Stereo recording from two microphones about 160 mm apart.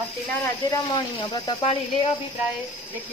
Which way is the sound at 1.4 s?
35° left (ahead or behind).